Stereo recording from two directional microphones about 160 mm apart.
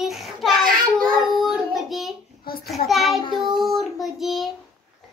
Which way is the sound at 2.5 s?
70° left (ahead or behind).